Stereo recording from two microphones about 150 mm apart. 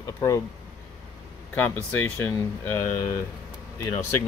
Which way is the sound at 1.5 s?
15° left (ahead or behind).